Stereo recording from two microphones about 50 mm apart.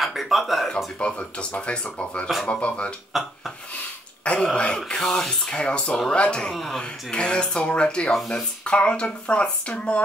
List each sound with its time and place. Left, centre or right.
0.0 s speech: centre
0.9 s speech: left
3.1 s speech: centre
4.4 s speech: centre
5.6 s speech: left
6.5 s speech: centre
6.8 s speech: centre